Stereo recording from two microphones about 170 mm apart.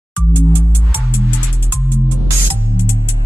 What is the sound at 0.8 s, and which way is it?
Music, centre (ahead or behind).